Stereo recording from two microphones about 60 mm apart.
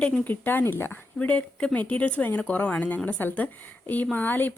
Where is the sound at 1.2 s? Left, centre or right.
Left.